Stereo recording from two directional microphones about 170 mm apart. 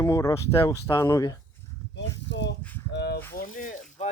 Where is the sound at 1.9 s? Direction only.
90° left.